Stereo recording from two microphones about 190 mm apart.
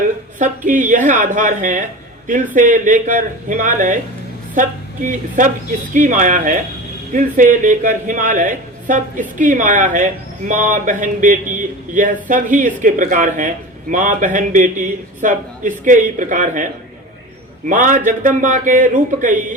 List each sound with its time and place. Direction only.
0.3 s a man's voice: 45° right (ahead or behind)
5.4 s a man's voice: 45° right (ahead or behind)
17.7 s a man's voice: 45° right (ahead or behind)